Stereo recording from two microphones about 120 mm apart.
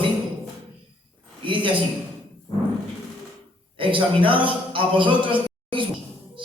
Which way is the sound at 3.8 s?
45° right (ahead or behind).